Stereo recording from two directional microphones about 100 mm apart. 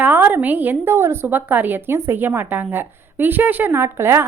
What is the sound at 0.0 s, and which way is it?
A woman's voice, 15° right (ahead or behind).